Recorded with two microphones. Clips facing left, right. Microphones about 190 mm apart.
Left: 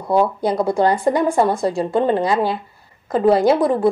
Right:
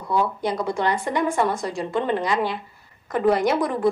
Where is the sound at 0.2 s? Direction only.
35° left (ahead or behind).